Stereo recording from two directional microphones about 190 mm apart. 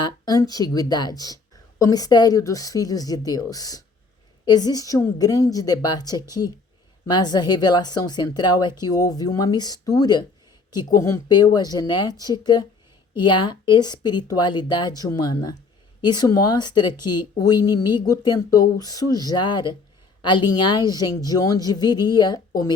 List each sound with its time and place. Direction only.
0.0 s speech: 20° left (ahead or behind)